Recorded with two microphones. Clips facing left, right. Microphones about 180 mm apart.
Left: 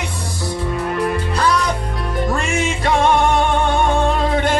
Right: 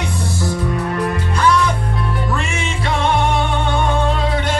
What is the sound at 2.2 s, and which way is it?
Music, 45° left (ahead or behind).